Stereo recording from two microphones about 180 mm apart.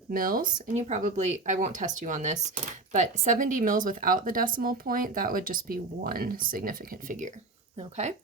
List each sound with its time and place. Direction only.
0.1 s speech: 50° right (ahead or behind)